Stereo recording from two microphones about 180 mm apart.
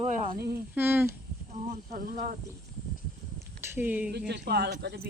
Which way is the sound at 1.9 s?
50° right (ahead or behind).